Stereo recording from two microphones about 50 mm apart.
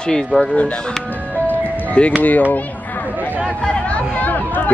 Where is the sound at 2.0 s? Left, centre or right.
Left.